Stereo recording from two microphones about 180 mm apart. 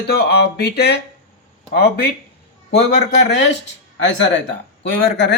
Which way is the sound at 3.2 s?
75° left (ahead or behind).